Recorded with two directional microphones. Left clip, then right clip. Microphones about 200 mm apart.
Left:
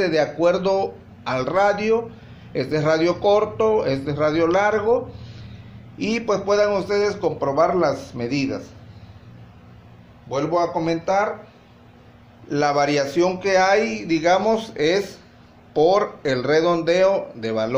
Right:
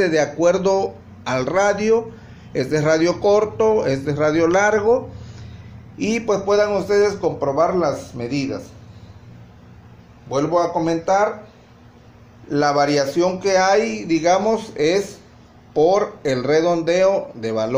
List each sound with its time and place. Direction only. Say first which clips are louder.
0.0 s a man's voice: right 2 dB; 15° right (ahead or behind); by 8.6 s 5° left (ahead or behind)
10.3 s speech: right 3 dB; 25° right (ahead or behind)
12.4 s a man's voice: right 2 dB; 5° right (ahead or behind)